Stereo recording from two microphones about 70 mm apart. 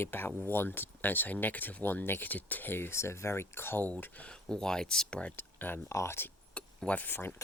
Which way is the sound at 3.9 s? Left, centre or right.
Centre.